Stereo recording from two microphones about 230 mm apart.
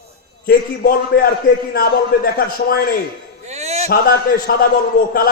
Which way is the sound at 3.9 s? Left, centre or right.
Left.